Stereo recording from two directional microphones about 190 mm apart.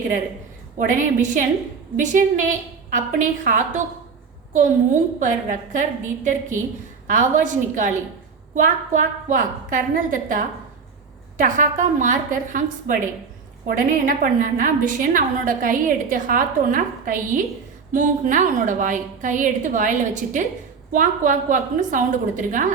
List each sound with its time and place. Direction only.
0.8 s a woman's voice: 40° right (ahead or behind)
5.2 s a woman's voice: 40° right (ahead or behind)